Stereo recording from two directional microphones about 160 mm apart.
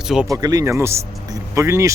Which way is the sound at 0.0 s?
5° right (ahead or behind).